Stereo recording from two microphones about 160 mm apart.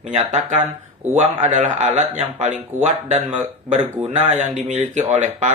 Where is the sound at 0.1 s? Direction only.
50° right (ahead or behind).